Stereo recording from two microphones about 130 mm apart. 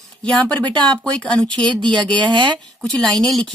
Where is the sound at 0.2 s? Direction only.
10° left (ahead or behind).